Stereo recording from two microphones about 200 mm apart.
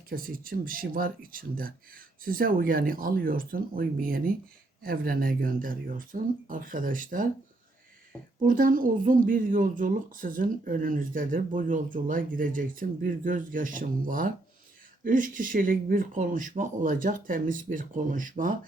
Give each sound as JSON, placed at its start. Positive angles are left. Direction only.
{"t": 0.1, "sound": "speech", "side_deg": -45}
{"t": 8.4, "sound": "speech", "side_deg": -45}